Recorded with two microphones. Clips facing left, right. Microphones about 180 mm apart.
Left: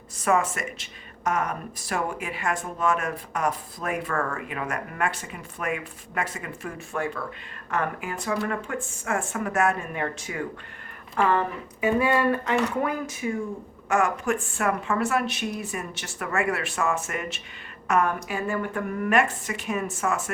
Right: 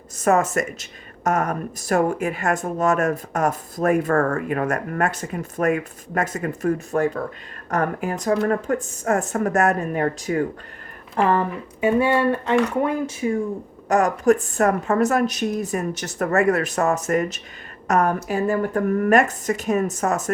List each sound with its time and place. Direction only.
0.2 s a woman's voice: 45° right (ahead or behind)